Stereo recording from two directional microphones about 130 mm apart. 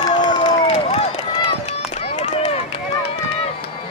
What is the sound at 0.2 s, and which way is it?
Crowd, 35° left (ahead or behind).